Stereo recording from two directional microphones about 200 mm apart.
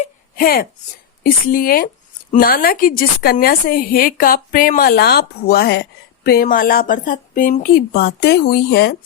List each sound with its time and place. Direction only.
0.3 s a woman's voice: 45° left (ahead or behind)